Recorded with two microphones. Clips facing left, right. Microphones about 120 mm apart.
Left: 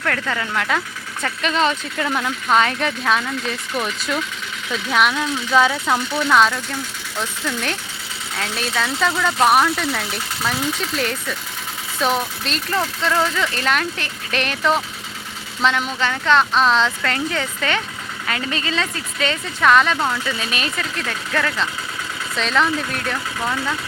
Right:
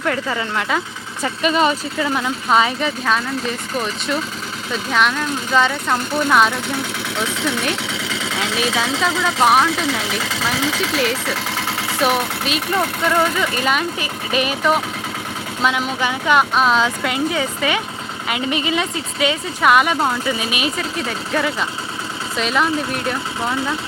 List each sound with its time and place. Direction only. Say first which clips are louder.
0.0 s speech: right 2 dB; 10° right (ahead or behind)
7.2 s speech: right 3 dB; 75° right (ahead or behind)
8.1 s sewing machine: right 3 dB; 90° right
9.2 s speech: right 1 dB; centre (ahead or behind)
10.0 s speech: right 3 dB; 90° right; by 13.1 s 60° right (ahead or behind)
13.1 s speech: right 2 dB; 5° right (ahead or behind)